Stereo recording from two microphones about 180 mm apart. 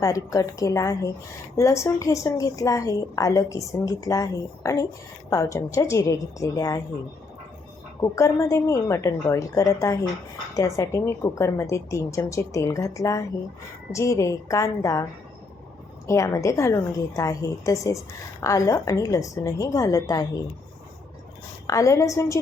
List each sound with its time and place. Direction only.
0.0 s a woman's voice: 20° left (ahead or behind)
8.0 s a woman's voice: 15° left (ahead or behind)
16.0 s a woman's voice: 15° left (ahead or behind)
21.7 s a woman's voice: 20° left (ahead or behind)